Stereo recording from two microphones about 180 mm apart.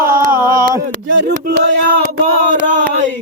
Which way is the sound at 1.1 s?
90° right.